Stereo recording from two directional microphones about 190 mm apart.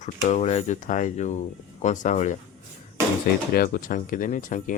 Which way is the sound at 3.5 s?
50° left (ahead or behind).